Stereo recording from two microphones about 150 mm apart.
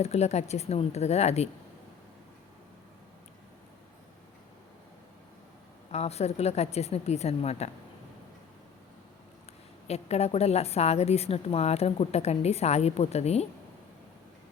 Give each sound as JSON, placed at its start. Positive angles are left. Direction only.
{"t": 0.0, "sound": "a woman's voice", "side_deg": 45}
{"t": 5.9, "sound": "a woman's voice", "side_deg": 45}
{"t": 9.8, "sound": "a woman's voice", "side_deg": 45}